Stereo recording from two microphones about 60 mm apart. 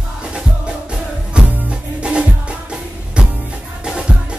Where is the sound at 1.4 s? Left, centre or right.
Centre.